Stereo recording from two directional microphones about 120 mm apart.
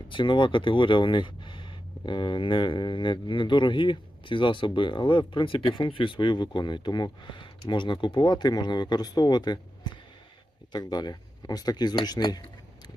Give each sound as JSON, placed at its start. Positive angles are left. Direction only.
{"t": 0.1, "sound": "speech", "side_deg": 40}